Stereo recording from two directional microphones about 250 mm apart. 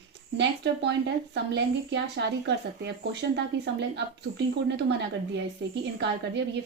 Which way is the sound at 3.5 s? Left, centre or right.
Right.